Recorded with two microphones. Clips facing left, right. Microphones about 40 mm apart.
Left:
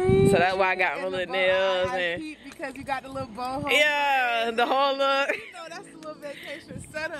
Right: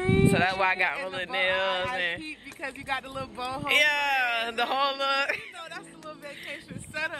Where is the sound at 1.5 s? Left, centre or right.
Right.